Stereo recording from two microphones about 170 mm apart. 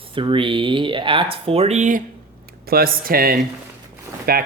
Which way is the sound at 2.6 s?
60° right (ahead or behind).